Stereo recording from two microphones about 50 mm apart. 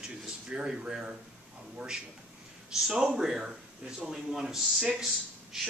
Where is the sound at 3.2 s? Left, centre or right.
Centre.